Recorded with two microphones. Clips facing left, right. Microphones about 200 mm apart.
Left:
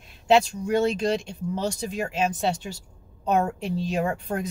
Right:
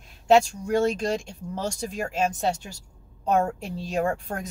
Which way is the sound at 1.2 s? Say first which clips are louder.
Left 3 dB; 45° right (ahead or behind).